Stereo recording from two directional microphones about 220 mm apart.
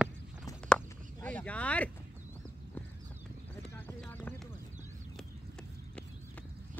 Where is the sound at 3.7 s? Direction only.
10° left (ahead or behind).